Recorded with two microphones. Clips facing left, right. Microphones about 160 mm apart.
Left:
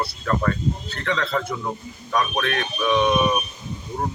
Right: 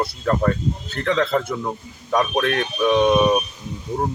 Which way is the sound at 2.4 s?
40° right (ahead or behind).